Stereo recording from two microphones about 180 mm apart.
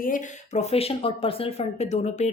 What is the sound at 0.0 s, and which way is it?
A woman's voice, 45° left (ahead or behind).